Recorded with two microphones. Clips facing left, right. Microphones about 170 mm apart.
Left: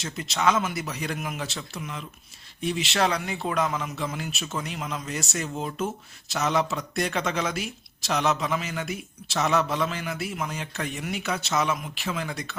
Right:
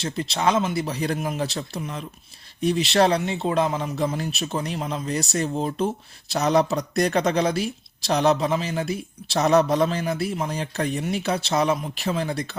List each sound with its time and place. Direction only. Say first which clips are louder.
0.0 s speech: right 2 dB; 35° right (ahead or behind)